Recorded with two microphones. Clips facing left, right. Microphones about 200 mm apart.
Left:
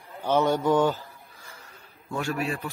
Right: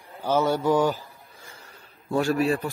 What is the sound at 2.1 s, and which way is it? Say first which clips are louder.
Speech: right 7 dB; 35° right (ahead or behind).